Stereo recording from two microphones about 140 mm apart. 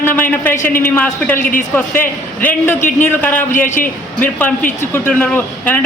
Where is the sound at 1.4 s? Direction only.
75° left (ahead or behind).